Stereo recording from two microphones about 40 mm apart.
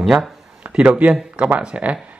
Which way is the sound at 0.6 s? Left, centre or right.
Right.